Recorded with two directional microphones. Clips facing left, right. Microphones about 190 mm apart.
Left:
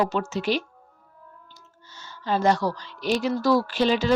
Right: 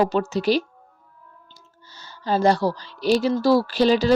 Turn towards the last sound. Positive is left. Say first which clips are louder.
# right 4 dB
turn(degrees=-35)  # may be behind; listen again after turning